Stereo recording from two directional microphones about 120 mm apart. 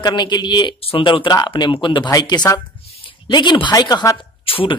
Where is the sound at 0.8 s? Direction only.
50° left (ahead or behind).